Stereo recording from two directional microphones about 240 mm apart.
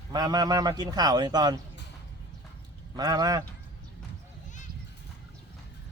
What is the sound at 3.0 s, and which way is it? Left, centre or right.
Speech, centre.